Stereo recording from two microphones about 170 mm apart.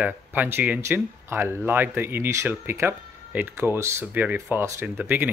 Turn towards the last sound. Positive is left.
turn(degrees=-10)  # may be behind; listen again after turning